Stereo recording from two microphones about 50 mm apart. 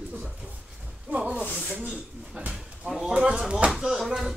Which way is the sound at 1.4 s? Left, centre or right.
Right.